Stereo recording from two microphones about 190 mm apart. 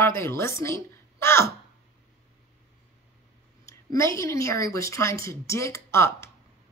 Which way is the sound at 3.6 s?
15° left (ahead or behind).